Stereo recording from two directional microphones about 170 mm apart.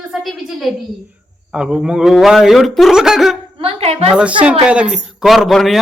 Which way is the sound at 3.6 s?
35° right (ahead or behind).